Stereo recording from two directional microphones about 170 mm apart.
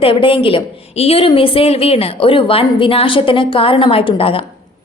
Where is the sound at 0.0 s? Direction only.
30° left (ahead or behind).